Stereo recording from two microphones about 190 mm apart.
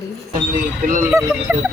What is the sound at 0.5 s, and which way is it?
Speech, 45° right (ahead or behind).